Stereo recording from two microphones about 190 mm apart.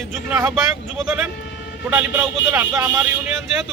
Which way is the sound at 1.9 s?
10° right (ahead or behind).